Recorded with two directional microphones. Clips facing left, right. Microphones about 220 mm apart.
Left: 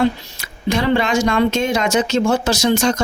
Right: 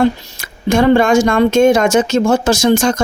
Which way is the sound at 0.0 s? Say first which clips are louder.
Right 4 dB; 50° right (ahead or behind).